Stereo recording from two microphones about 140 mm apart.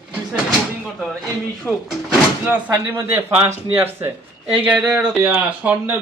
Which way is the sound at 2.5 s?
15° right (ahead or behind).